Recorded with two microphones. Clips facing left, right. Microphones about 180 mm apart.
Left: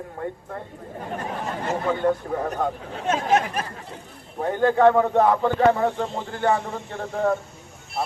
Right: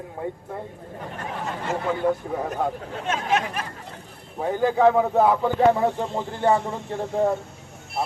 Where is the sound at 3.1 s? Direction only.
40° left (ahead or behind).